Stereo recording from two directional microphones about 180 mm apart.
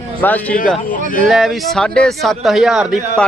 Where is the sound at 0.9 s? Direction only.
50° left (ahead or behind).